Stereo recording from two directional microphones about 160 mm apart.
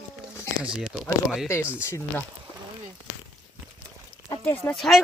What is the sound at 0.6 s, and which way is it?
Speech, 5° right (ahead or behind).